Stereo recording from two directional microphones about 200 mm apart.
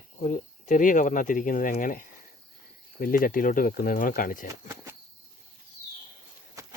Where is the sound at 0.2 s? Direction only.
35° left (ahead or behind).